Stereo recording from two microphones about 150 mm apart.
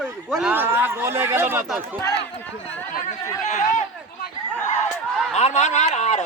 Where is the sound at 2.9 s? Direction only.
55° left (ahead or behind).